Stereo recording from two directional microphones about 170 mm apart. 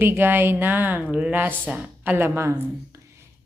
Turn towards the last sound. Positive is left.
turn(degrees=-15)  # may be behind; listen again after turning